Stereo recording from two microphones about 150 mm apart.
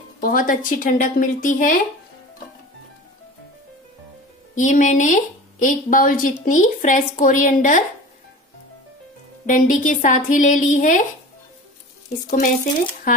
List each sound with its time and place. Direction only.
0.2 s speech: 65° left (ahead or behind)
4.6 s speech: 55° left (ahead or behind)
9.5 s speech: 60° left (ahead or behind)
12.3 s speech: 55° left (ahead or behind)